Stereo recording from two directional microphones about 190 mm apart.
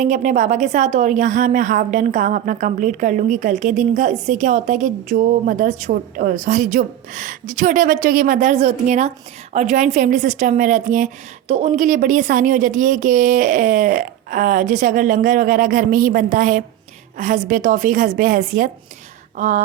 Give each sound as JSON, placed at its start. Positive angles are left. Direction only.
{"t": 0.0, "sound": "a woman's voice", "side_deg": -40}